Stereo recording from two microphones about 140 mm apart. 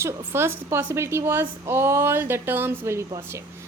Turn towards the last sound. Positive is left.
turn(degrees=-20)  # may be behind; listen again after turning